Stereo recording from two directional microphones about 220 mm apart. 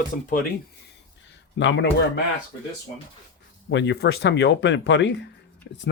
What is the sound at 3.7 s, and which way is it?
Speech, 55° left (ahead or behind).